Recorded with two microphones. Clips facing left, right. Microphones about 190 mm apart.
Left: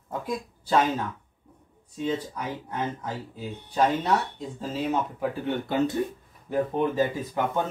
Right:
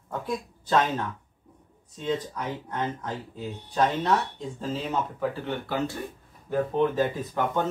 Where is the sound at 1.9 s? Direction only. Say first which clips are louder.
Left 1 dB; 10° left (ahead or behind).